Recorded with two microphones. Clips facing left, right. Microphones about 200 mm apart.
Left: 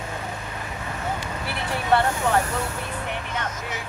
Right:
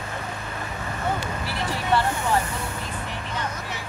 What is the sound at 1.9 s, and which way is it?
Speech, 60° left (ahead or behind).